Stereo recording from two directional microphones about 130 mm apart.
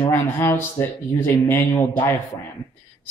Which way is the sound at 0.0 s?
15° left (ahead or behind).